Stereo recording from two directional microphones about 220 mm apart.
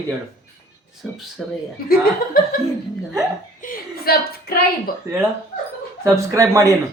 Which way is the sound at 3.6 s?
40° left (ahead or behind).